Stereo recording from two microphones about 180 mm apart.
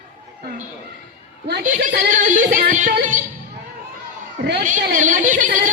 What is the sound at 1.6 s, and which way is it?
Speech, 45° right (ahead or behind).